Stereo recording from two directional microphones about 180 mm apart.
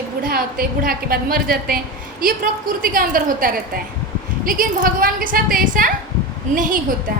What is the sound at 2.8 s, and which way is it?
A woman's voice, 50° right (ahead or behind).